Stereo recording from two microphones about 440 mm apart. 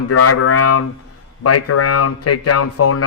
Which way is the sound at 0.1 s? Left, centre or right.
Left.